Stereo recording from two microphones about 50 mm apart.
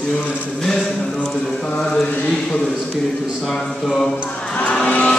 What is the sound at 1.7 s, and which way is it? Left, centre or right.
Mantra, centre.